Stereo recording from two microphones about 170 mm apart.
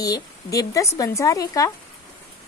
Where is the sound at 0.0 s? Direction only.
20° left (ahead or behind).